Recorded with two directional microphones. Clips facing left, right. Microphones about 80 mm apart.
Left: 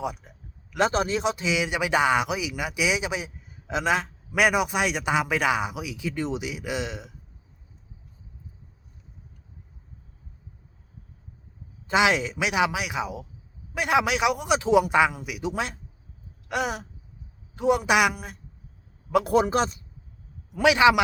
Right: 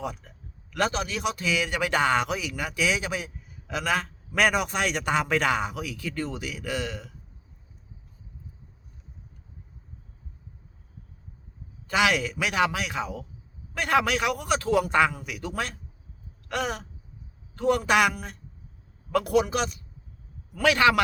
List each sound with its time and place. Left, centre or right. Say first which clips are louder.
0.0 s a sound: left 3 dB; centre
0.9 s speech: left 4 dB; left
11.9 s speech: left 2 dB; left
19.2 s speech: left 1 dB; left
20.5 s speech: left 3 dB; centre